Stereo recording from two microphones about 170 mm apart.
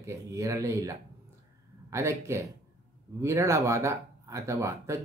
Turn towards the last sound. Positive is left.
turn(degrees=-15)  # may be behind; listen again after turning